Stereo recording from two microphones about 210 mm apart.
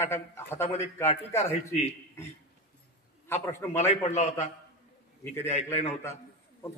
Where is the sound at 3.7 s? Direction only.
30° left (ahead or behind).